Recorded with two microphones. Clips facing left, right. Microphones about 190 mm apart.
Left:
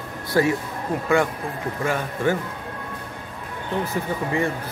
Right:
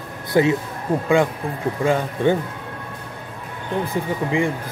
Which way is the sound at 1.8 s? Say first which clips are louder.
Right 5 dB; 15° right (ahead or behind).